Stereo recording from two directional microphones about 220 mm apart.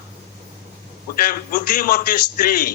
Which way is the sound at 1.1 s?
40° left (ahead or behind).